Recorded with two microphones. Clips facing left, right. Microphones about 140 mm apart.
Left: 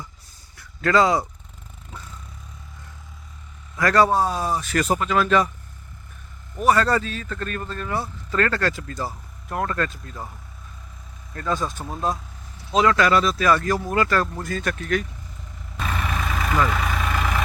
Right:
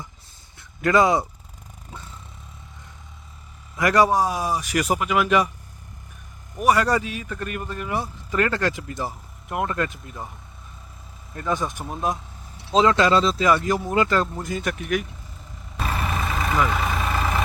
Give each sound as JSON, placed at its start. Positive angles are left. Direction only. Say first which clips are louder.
{"t": 0.5, "sound": "a sound", "louder": "even", "side_deg": -20}
{"t": 3.8, "sound": "speech", "louder": "even", "side_deg": -15}
{"t": 6.6, "sound": "speech", "louder": "even", "side_deg": -15}
{"t": 11.3, "sound": "speech", "louder": "even", "side_deg": -20}
{"t": 16.0, "sound": "vehicle", "louder": "even", "side_deg": 0}